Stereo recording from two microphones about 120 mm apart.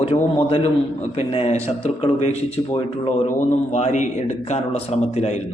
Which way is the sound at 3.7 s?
70° left (ahead or behind).